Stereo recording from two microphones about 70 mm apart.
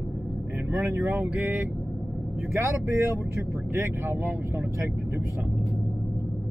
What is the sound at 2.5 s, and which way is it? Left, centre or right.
Speech, right.